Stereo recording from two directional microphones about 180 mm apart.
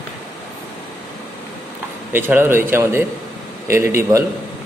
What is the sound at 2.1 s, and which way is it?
Speech, 10° right (ahead or behind).